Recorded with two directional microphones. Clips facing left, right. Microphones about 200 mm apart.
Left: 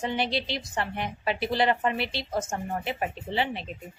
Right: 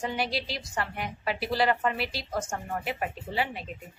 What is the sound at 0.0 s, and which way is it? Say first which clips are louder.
A woman's voice: left 2 dB; 25° left (ahead or behind).